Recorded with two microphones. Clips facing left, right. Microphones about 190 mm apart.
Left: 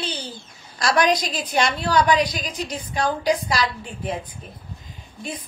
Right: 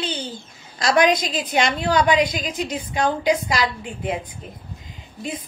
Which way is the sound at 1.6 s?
25° right (ahead or behind).